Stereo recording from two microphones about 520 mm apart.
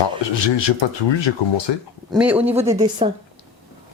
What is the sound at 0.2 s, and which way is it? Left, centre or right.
Speech, left.